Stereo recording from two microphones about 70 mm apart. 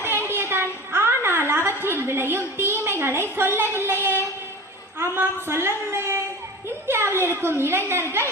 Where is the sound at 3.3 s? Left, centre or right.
Right.